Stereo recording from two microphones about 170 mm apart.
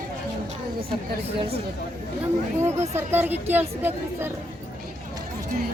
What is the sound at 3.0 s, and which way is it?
A woman's voice, 15° right (ahead or behind).